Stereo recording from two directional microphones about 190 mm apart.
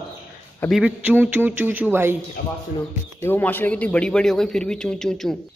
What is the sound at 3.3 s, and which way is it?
A man's voice, 10° left (ahead or behind).